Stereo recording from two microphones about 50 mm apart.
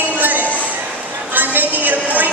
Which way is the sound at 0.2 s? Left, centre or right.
Right.